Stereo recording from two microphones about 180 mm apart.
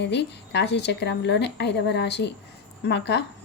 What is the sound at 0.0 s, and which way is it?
A woman's voice, 70° left (ahead or behind).